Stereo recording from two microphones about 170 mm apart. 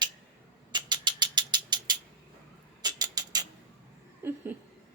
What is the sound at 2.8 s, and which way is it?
Rodents, 25° right (ahead or behind).